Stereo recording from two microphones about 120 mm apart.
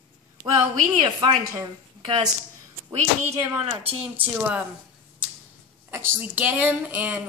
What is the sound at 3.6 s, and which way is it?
Speech, 55° right (ahead or behind).